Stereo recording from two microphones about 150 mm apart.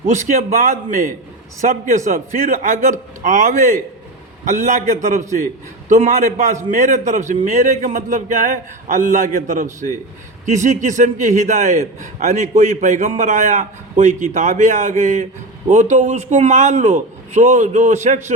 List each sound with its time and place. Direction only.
0.1 s a man's voice: 55° right (ahead or behind)